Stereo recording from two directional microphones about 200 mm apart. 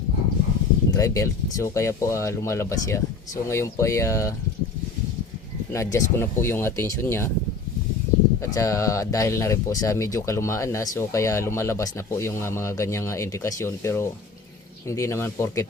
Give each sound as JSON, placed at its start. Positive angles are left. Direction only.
{"t": 0.9, "sound": "speech", "side_deg": 15}
{"t": 5.7, "sound": "speech", "side_deg": 15}
{"t": 8.5, "sound": "speech", "side_deg": 15}